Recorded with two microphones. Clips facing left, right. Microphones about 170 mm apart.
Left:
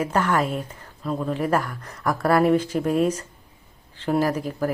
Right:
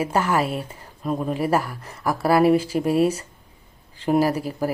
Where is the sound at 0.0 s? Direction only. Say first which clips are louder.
Right 1 dB; 5° right (ahead or behind).